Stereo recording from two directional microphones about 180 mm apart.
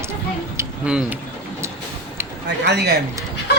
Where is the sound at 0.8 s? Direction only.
5° right (ahead or behind).